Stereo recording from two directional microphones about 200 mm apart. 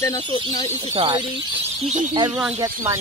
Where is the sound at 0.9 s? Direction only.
25° right (ahead or behind).